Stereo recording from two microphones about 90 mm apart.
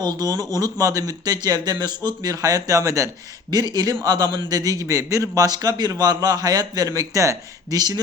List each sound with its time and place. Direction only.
0.0 s a man's voice: 50° right (ahead or behind)
3.5 s a man's voice: 50° right (ahead or behind)